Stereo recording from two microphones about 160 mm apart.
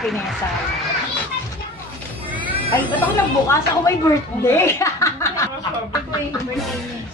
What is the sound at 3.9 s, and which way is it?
Speech, 20° left (ahead or behind).